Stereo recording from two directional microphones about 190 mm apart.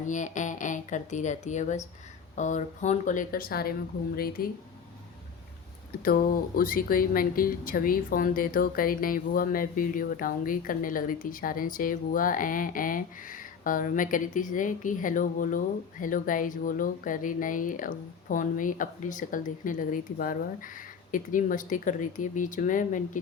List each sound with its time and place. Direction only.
0.1 s speech: 40° left (ahead or behind)
6.6 s speech: 50° left (ahead or behind)